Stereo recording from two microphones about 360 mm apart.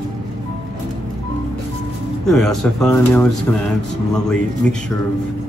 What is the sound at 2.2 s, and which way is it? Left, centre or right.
Speech, centre.